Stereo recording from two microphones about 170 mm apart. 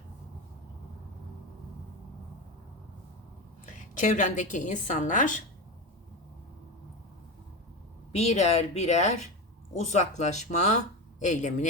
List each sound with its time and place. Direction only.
3.7 s speech: 45° left (ahead or behind)
8.1 s speech: 40° left (ahead or behind)